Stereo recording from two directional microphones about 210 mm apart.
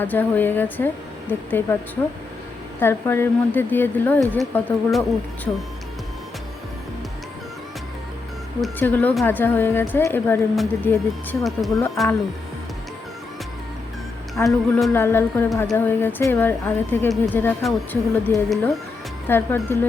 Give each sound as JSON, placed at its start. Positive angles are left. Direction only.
{"t": 0.0, "sound": "a woman's voice", "side_deg": 10}
{"t": 2.8, "sound": "a woman's voice", "side_deg": 10}
{"t": 8.6, "sound": "a woman's voice", "side_deg": 10}
{"t": 14.4, "sound": "a woman's voice", "side_deg": 10}